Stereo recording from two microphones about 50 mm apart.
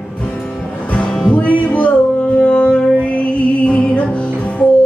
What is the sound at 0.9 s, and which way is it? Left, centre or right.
Music, left.